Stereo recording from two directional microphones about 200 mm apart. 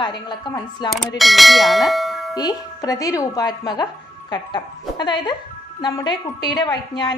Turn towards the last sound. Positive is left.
turn(degrees=20)  # may be behind; listen again after turning